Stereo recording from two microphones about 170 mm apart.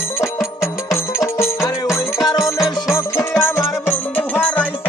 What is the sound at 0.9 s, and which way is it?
Music, 15° left (ahead or behind).